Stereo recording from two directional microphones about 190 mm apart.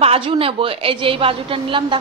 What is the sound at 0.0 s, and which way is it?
A woman's voice, 30° right (ahead or behind).